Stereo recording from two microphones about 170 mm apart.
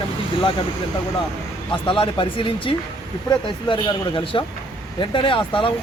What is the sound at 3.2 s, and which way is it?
Speech, 30° left (ahead or behind).